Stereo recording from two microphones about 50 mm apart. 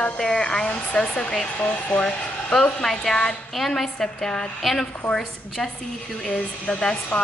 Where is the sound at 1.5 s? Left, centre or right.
Left.